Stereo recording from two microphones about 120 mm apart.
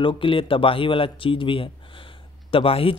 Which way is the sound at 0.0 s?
45° left (ahead or behind).